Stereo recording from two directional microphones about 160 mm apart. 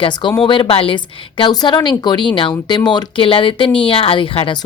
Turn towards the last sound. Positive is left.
turn(degrees=35)  # may be behind; listen again after turning